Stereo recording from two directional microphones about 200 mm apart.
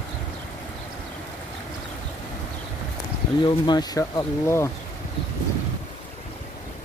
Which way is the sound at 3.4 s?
20° left (ahead or behind).